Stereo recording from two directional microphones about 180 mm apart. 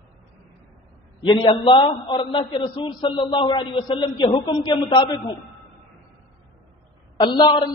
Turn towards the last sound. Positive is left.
turn(degrees=25)  # may be behind; listen again after turning